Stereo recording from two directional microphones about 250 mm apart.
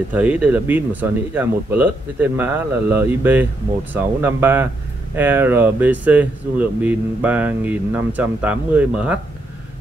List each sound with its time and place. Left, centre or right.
0.1 s speech: centre